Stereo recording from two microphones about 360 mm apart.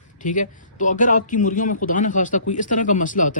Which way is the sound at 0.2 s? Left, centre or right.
Left.